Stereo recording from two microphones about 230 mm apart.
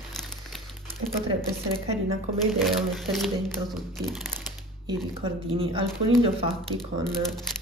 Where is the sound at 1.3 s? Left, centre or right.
Right.